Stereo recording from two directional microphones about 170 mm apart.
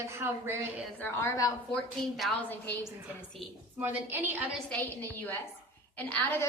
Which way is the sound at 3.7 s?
10° right (ahead or behind).